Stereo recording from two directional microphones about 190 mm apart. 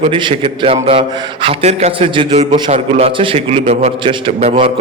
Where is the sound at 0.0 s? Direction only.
25° right (ahead or behind).